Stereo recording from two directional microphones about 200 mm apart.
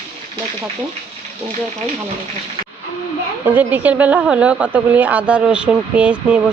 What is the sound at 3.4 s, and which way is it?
A woman's voice, 10° right (ahead or behind).